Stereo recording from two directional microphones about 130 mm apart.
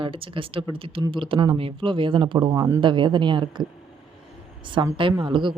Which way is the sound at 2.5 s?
20° right (ahead or behind).